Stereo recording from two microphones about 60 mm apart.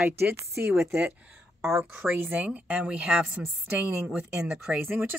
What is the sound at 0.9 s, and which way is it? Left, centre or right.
A woman's voice, centre.